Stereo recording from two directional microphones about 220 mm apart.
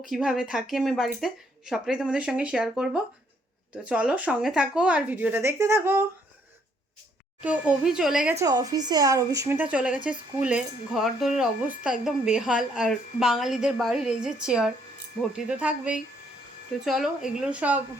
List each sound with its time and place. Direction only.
0.1 s speech: centre (ahead or behind)
7.4 s speech: 5° right (ahead or behind)
8.4 s speech: 15° right (ahead or behind)